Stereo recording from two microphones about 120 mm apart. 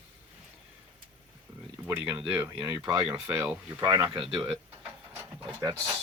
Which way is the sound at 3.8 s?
30° right (ahead or behind).